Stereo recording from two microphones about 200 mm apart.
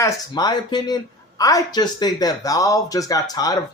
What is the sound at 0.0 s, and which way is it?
Speech, 20° left (ahead or behind).